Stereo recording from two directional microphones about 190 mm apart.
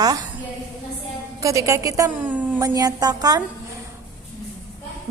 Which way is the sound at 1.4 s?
15° right (ahead or behind).